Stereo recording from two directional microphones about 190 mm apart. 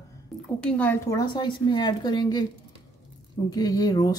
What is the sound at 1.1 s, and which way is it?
Speech, 20° left (ahead or behind).